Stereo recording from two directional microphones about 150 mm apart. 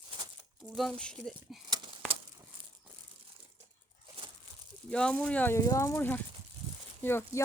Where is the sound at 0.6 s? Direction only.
Centre (ahead or behind).